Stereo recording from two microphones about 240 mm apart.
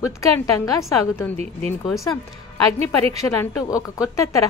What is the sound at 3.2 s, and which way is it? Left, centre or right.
Speech, centre.